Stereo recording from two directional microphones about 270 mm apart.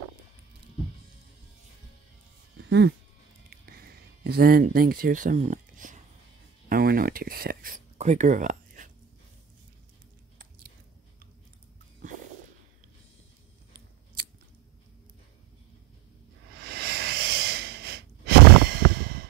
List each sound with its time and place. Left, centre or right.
3.4 s a sound: right
6.7 s speech: right
16.6 s breathing: right